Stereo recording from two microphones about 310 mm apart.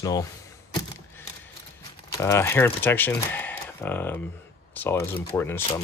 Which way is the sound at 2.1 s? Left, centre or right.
Centre.